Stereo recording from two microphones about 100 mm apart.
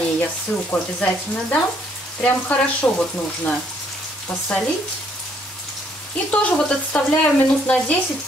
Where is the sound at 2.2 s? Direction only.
10° left (ahead or behind).